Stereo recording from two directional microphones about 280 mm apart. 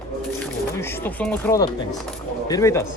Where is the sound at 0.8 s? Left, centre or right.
Centre.